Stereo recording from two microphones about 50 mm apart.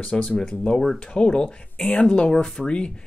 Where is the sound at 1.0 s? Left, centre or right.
Centre.